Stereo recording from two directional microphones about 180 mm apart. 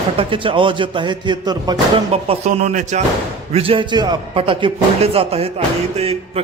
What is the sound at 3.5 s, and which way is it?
A man's voice, 30° right (ahead or behind).